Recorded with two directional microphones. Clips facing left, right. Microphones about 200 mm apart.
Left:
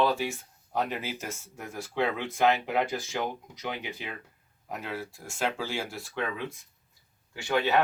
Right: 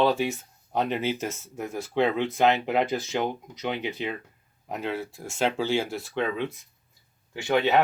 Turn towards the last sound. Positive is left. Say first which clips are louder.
# right 4 dB
turn(degrees=-20)  # may be behind; listen again after turning